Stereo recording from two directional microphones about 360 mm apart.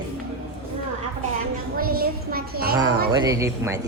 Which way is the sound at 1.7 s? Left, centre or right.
Right.